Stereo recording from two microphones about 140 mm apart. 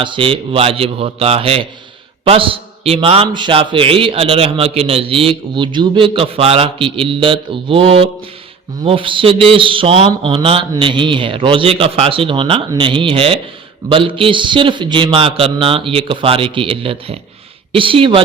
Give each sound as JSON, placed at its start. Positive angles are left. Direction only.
{"t": 0.0, "sound": "a man's voice", "side_deg": -40}